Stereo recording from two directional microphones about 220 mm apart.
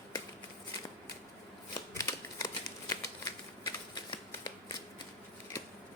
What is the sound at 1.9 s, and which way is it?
Shuffling cards, 15° left (ahead or behind).